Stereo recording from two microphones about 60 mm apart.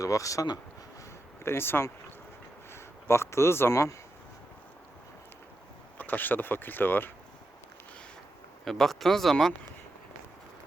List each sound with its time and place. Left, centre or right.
0.0 s speech: left
1.5 s speech: left
3.7 s speech: left
6.0 s speech: left
8.6 s speech: centre